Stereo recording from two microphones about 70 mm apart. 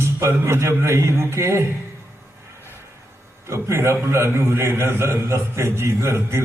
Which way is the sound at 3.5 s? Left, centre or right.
Right.